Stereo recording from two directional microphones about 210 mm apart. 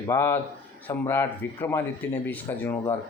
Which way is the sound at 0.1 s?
10° left (ahead or behind).